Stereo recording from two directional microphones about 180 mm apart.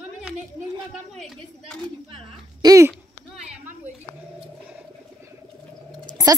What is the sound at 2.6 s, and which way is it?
Speech, 15° right (ahead or behind).